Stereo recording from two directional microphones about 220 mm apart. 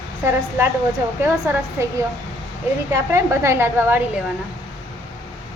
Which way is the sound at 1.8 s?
10° right (ahead or behind).